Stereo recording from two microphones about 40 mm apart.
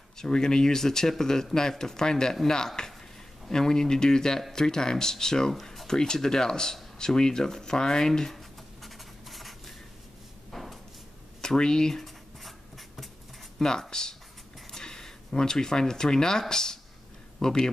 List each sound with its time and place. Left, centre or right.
0.2 s speech: centre
5.5 s speech: centre
8.8 s writing: centre
10.5 s a sound: centre
11.4 s speech: centre
12.0 s writing: centre
13.6 s speech: centre